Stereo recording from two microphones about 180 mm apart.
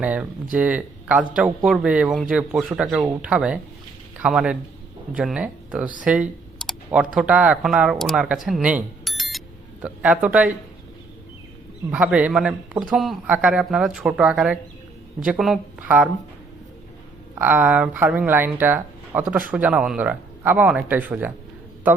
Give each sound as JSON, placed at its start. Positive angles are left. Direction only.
{"t": 0.0, "sound": "speech", "side_deg": -10}
{"t": 8.4, "sound": "music", "side_deg": -5}
{"t": 9.8, "sound": "speech", "side_deg": -5}
{"t": 11.9, "sound": "speech", "side_deg": -10}
{"t": 17.3, "sound": "speech", "side_deg": -10}